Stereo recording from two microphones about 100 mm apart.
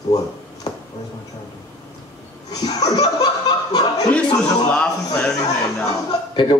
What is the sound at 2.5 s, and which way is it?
Speech, 40° left (ahead or behind).